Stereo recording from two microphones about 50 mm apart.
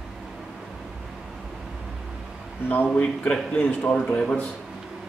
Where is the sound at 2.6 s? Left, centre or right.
Left.